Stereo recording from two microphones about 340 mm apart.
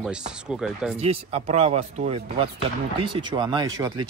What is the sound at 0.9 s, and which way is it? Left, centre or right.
Speech, centre.